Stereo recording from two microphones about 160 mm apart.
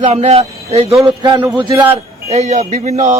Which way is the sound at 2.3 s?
45° right (ahead or behind).